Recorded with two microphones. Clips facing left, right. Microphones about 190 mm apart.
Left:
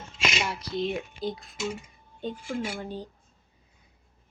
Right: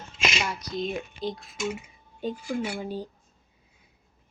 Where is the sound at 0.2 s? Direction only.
Centre (ahead or behind).